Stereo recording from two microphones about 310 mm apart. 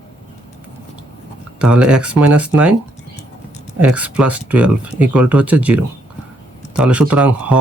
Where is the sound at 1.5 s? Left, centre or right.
Centre.